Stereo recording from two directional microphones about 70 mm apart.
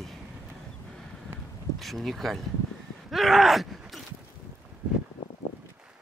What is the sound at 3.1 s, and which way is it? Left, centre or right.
Groan, centre.